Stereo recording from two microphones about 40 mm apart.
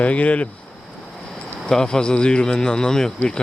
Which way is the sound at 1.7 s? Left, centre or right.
Centre.